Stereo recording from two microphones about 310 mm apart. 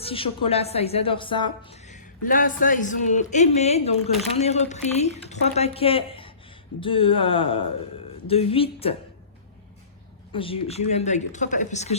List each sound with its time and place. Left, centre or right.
0.0 s a woman's voice: centre
10.3 s speech: centre